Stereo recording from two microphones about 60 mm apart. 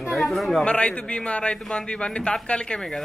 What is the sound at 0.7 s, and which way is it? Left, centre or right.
A man's voice, centre.